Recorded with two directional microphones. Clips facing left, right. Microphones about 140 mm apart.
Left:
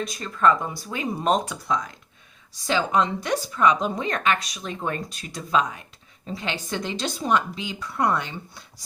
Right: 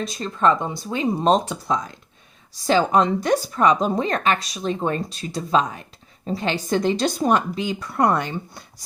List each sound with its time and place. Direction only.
0.0 s a woman's voice: 30° right (ahead or behind); by 8.6 s 50° right (ahead or behind)